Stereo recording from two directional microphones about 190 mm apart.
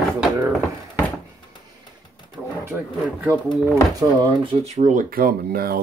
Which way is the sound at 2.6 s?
10° right (ahead or behind).